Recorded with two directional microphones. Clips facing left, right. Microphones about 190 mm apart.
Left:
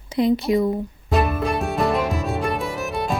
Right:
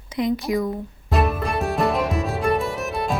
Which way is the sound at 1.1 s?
Centre (ahead or behind).